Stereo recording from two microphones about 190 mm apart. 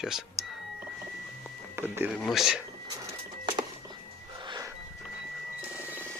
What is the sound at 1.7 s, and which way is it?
Speech, 10° right (ahead or behind).